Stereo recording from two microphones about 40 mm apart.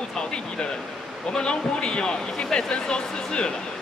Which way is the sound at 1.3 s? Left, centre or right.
Left.